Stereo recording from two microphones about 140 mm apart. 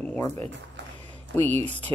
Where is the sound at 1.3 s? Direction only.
15° left (ahead or behind).